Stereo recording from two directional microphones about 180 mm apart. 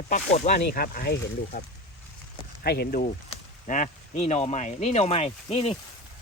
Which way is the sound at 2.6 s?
60° left (ahead or behind).